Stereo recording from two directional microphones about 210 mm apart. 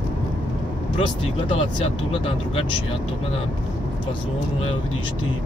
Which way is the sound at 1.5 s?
25° left (ahead or behind).